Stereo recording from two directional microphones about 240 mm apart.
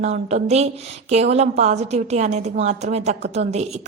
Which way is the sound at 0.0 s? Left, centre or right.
Right.